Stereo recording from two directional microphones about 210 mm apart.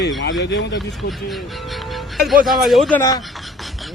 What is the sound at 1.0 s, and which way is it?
Speech, centre (ahead or behind).